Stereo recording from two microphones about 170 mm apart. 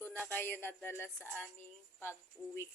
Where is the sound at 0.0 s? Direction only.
10° left (ahead or behind).